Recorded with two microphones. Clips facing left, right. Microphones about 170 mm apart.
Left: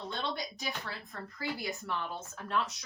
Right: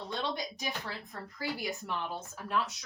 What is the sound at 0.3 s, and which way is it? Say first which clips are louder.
A woman's voice: right 1 dB; 20° right (ahead or behind).